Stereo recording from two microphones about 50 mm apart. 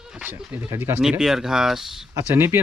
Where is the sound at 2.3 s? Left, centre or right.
Right.